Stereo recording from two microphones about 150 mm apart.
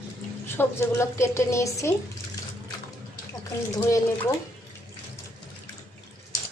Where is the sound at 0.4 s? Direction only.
15° left (ahead or behind).